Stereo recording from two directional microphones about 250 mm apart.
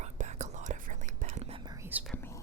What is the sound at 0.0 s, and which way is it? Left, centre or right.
Whispering, right.